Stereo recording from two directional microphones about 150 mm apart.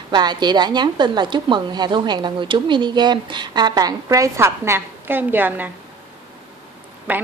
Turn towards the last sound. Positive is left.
turn(degrees=-10)  # may be behind; listen again after turning